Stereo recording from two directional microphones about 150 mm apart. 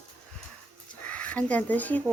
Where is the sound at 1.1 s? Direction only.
10° left (ahead or behind).